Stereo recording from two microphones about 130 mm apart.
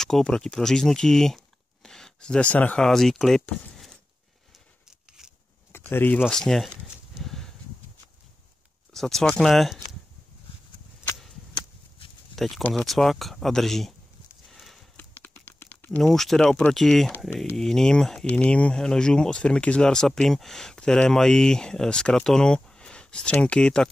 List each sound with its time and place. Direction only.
0.0 s speech: 5° left (ahead or behind)
5.7 s speech: 15° left (ahead or behind)
6.2 s speech: 5° left (ahead or behind)
8.9 s speech: centre (ahead or behind)
12.4 s speech: centre (ahead or behind)
14.5 s horse: centre (ahead or behind)
15.0 s a sound: 15° left (ahead or behind)
16.0 s speech: centre (ahead or behind)